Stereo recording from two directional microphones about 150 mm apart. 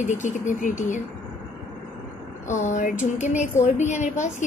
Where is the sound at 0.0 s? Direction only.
55° left (ahead or behind).